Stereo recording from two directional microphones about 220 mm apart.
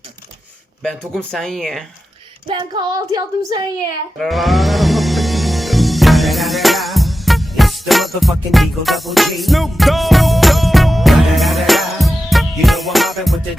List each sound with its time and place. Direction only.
0.8 s speech: 5° left (ahead or behind)
2.5 s child singing: 20° right (ahead or behind)
4.2 s music: centre (ahead or behind)